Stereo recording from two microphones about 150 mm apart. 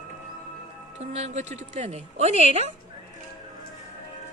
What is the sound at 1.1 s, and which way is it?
A woman's voice, 50° right (ahead or behind).